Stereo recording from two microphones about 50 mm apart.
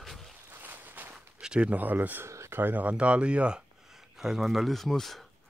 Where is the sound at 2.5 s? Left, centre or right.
Right.